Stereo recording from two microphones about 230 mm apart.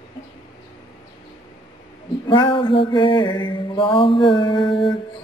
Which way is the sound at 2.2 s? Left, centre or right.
Left.